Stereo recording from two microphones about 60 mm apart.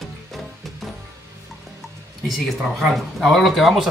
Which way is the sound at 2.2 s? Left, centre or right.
Centre.